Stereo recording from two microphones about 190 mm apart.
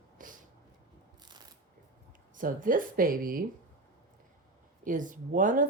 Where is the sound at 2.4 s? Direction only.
45° right (ahead or behind).